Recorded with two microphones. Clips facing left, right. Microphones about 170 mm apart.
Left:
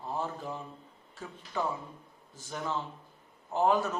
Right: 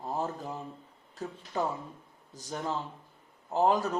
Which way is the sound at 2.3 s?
40° right (ahead or behind).